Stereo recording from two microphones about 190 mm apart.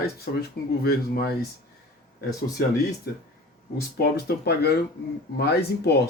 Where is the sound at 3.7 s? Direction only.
55° left (ahead or behind).